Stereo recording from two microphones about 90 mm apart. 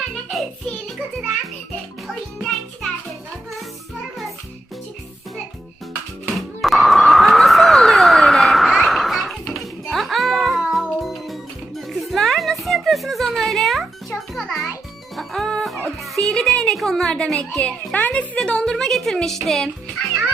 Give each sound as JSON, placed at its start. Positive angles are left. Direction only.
{"t": 2.4, "sound": "music", "side_deg": 5}
{"t": 6.3, "sound": "a sound", "side_deg": 0}
{"t": 9.5, "sound": "music", "side_deg": 0}
{"t": 16.1, "sound": "a child's voice", "side_deg": 5}